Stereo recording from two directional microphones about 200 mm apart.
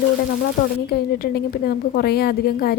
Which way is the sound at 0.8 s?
50° left (ahead or behind).